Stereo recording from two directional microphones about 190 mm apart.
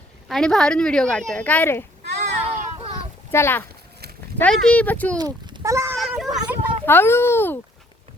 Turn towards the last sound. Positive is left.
turn(degrees=10)  # may be behind; listen again after turning